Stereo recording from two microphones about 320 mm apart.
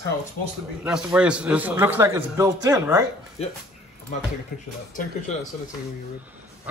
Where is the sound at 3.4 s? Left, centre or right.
Centre.